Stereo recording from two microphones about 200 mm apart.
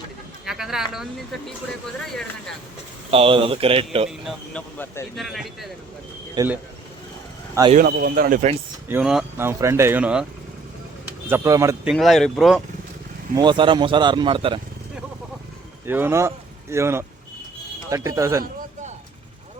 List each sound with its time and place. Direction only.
0.4 s speech: centre (ahead or behind)
3.1 s speech: 25° right (ahead or behind)
4.3 s speech: 10° left (ahead or behind)
6.3 s speech: 15° right (ahead or behind)
7.7 s speech: 45° right (ahead or behind)
8.9 s speech: 5° right (ahead or behind)
11.3 s speech: 15° right (ahead or behind)
11.9 s speech: centre (ahead or behind)
13.3 s speech: 20° right (ahead or behind)
15.9 s speech: 10° right (ahead or behind)